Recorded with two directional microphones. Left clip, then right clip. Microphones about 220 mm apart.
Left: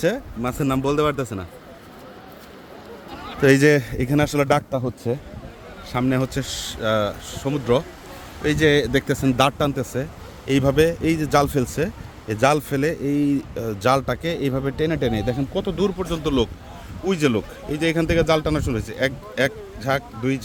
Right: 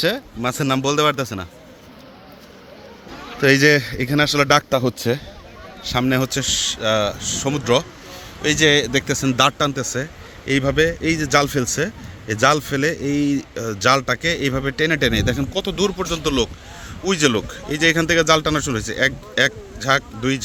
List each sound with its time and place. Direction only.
0.0 s speech: 5° left (ahead or behind)
3.4 s speech: 10° left (ahead or behind)
4.7 s a man's voice: 15° right (ahead or behind)
5.8 s speech: centre (ahead or behind)